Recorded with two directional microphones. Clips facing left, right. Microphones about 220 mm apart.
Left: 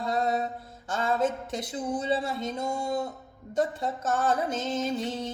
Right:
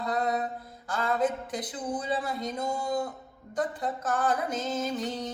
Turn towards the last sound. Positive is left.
turn(degrees=25)  # may be behind; listen again after turning